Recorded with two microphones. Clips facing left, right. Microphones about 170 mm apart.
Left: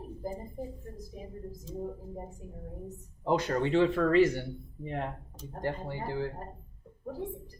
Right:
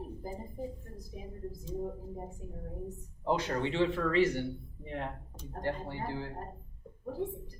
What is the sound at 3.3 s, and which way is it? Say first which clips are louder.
Speech: left 5 dB; 45° left (ahead or behind).